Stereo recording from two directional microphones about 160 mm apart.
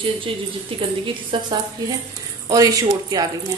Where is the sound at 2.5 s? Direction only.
20° right (ahead or behind).